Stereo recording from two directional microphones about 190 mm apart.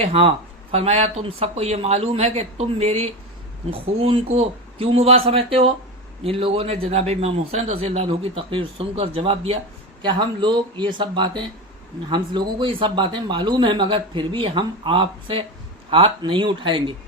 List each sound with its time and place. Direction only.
0.0 s a man's voice: 30° right (ahead or behind)